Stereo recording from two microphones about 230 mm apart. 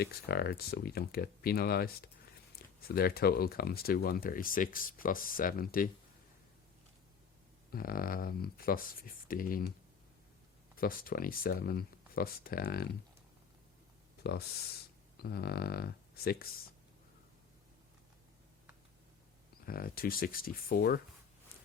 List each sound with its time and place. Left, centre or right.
0.0 s speech: left
7.7 s speech: left
10.8 s speech: left
14.2 s speech: left
19.6 s speech: left